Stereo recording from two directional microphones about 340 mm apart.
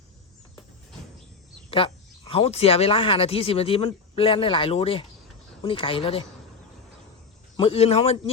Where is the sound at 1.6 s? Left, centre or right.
Centre.